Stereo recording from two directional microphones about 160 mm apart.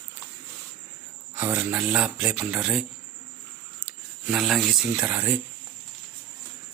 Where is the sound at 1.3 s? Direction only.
10° right (ahead or behind).